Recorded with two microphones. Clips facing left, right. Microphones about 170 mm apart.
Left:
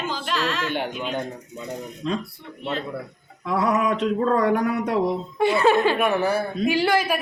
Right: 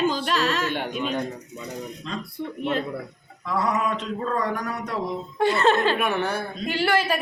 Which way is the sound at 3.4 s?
60° left (ahead or behind).